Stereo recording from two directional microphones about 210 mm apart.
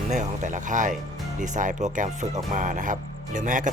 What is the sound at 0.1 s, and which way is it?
Speech, 35° right (ahead or behind).